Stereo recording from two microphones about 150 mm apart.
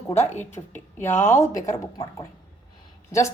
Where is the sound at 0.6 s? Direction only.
30° left (ahead or behind).